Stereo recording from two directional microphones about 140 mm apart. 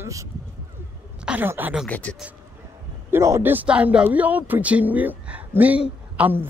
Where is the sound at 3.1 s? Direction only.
20° right (ahead or behind).